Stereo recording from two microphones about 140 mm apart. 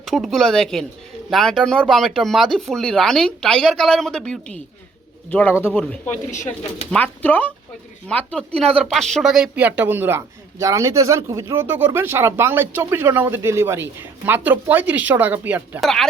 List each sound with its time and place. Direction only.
0.0 s speech: centre (ahead or behind)
6.3 s speech: 60° left (ahead or behind)
6.9 s speech: 10° left (ahead or behind); by 15.8 s 10° right (ahead or behind)
15.8 s speech: centre (ahead or behind)